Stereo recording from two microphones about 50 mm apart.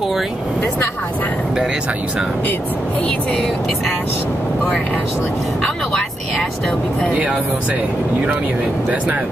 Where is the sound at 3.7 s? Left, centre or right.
Centre.